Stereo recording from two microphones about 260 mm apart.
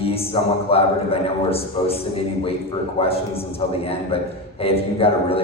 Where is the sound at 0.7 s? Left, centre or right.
Left.